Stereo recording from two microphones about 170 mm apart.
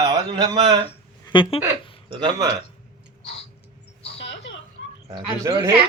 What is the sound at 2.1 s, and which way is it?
Speech, 25° right (ahead or behind).